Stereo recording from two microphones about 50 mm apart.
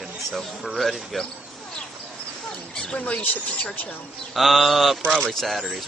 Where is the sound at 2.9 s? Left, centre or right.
Left.